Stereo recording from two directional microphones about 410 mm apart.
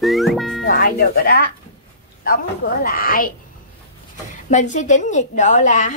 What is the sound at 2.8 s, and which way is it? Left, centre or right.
Speech, left.